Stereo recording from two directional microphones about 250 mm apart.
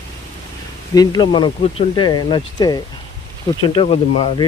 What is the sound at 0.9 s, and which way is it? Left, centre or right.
Speech, centre.